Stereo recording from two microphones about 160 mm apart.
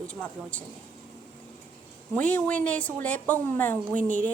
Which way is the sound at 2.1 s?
10° left (ahead or behind).